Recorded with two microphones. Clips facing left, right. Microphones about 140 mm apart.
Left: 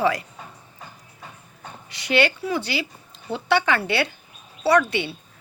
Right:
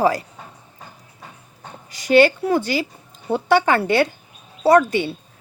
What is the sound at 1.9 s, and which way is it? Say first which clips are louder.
Speech: right 7 dB; 45° right (ahead or behind).